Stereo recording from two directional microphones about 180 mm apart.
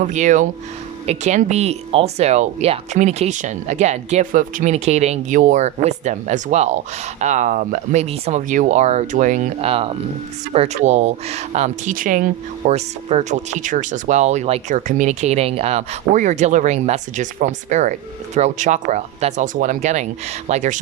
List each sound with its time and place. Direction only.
0.0 s speech: 45° right (ahead or behind)